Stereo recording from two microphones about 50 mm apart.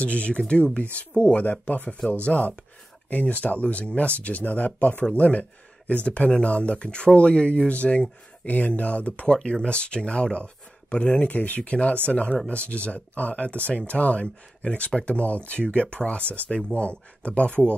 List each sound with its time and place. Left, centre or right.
0.0 s speech: left
2.3 s speech: left
3.1 s speech: left